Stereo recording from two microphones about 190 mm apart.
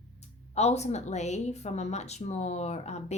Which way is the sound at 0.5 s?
35° left (ahead or behind).